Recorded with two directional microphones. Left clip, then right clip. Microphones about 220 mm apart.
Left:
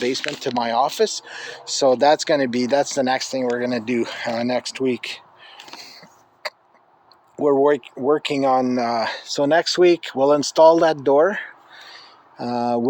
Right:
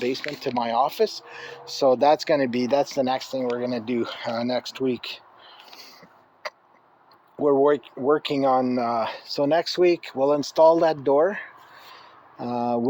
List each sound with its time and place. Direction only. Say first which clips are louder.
0.4 s speech: left 2 dB; 25° left (ahead or behind)
3.4 s a sound: left 4 dB; 25° left (ahead or behind)
7.3 s speech: left 3 dB; 25° left (ahead or behind)